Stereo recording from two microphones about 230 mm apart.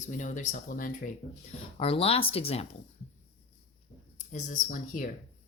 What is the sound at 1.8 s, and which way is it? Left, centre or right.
Speech, left.